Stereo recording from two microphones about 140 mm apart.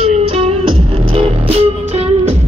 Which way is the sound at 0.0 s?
40° right (ahead or behind).